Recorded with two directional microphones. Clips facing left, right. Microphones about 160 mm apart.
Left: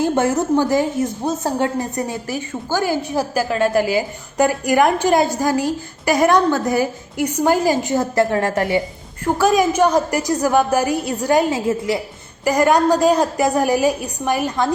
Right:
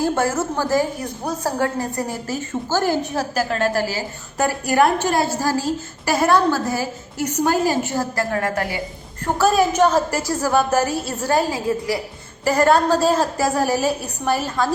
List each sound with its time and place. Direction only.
0.0 s a woman's voice: 20° left (ahead or behind)
9.2 s a woman's voice: 10° left (ahead or behind)